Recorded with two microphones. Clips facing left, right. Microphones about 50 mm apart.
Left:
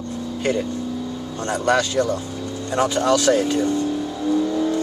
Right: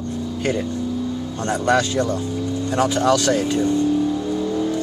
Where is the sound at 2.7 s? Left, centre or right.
Centre.